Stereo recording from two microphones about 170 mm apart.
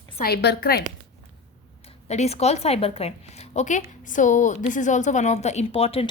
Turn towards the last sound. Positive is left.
turn(degrees=35)  # may be behind; listen again after turning